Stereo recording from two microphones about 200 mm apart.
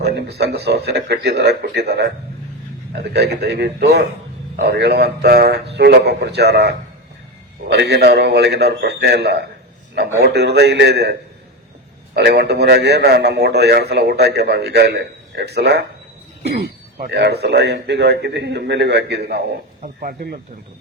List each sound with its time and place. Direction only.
0.0 s a man's voice: 55° right (ahead or behind)